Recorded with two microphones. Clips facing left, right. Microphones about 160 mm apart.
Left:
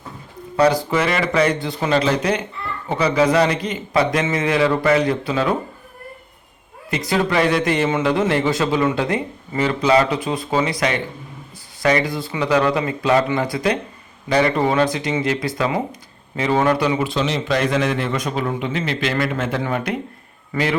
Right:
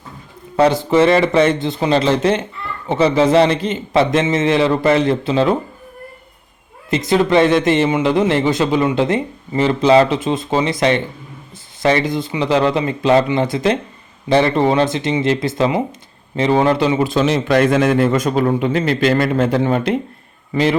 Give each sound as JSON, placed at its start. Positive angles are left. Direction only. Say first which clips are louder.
{"t": 0.5, "sound": "speech", "louder": "right 3 dB", "side_deg": -25}
{"t": 6.9, "sound": "speech", "louder": "right 5 dB", "side_deg": -25}
{"t": 17.0, "sound": "a man's voice", "louder": "right 5 dB", "side_deg": -45}